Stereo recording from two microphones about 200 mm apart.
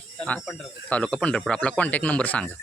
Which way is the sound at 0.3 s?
5° left (ahead or behind).